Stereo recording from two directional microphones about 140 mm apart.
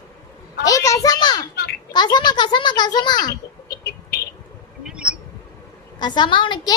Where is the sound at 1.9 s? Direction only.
30° left (ahead or behind).